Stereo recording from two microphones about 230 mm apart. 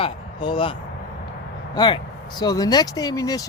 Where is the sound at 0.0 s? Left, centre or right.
Left.